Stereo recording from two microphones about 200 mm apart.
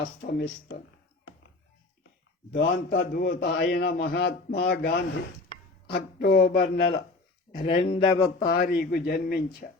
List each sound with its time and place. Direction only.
0.0 s speech: 55° left (ahead or behind)
2.6 s a man's voice: 55° left (ahead or behind)
7.8 s speech: 30° left (ahead or behind)
8.4 s a man's voice: 45° left (ahead or behind)